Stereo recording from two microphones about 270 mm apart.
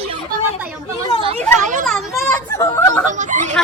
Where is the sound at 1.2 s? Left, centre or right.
Right.